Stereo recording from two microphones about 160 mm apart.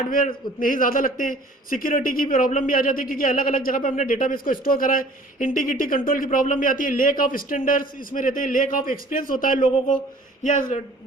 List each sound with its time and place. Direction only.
0.0 s a man's voice: 60° left (ahead or behind)